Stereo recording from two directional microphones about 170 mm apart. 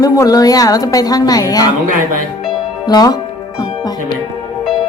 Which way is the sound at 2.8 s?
25° left (ahead or behind).